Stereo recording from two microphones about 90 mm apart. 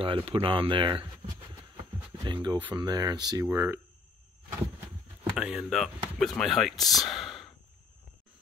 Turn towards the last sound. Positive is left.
turn(degrees=0)  # may be behind; listen again after turning